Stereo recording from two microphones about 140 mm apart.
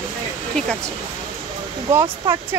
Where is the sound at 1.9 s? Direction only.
20° right (ahead or behind).